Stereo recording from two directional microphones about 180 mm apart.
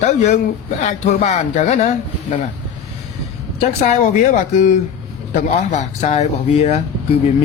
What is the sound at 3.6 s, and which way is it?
A man's voice, 40° left (ahead or behind).